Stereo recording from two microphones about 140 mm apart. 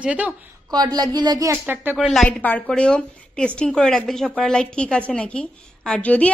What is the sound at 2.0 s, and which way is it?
Speech, centre (ahead or behind).